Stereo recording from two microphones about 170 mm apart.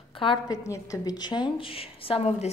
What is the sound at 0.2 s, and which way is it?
A woman's voice, 30° left (ahead or behind).